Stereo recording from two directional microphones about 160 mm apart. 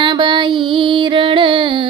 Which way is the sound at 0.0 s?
30° right (ahead or behind).